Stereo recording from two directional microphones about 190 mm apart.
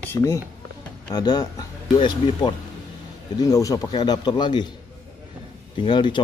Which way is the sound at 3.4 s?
20° left (ahead or behind).